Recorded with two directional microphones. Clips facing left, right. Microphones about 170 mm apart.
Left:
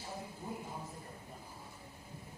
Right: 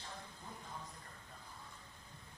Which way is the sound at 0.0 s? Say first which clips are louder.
Left 7 dB; 10° left (ahead or behind).